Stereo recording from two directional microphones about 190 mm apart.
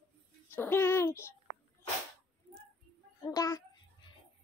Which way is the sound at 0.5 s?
10° left (ahead or behind).